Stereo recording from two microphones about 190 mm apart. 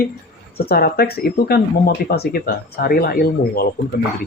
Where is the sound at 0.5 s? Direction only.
55° left (ahead or behind).